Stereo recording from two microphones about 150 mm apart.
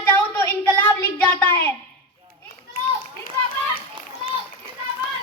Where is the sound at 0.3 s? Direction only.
15° left (ahead or behind).